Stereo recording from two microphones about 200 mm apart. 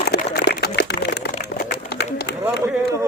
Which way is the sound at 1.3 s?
50° left (ahead or behind).